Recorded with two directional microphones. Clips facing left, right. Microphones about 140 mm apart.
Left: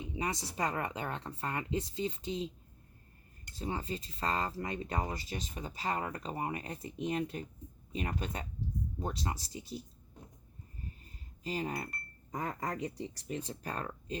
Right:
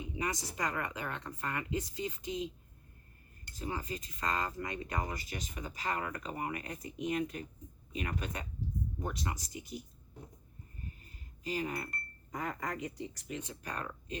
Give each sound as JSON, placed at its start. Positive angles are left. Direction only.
{"t": 0.2, "sound": "speech", "side_deg": 25}
{"t": 3.5, "sound": "speech", "side_deg": 30}
{"t": 11.4, "sound": "speech", "side_deg": 30}